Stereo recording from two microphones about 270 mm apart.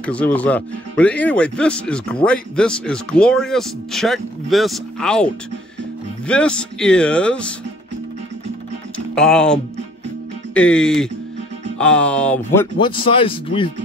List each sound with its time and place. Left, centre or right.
0.0 s speech: centre
8.9 s music: centre
10.5 s speech: centre
12.5 s speech: centre